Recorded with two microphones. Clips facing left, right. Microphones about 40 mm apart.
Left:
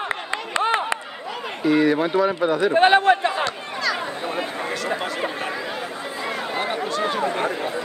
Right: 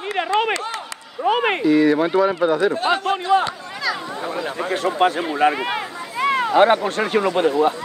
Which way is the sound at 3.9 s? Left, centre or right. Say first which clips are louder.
Even; centre.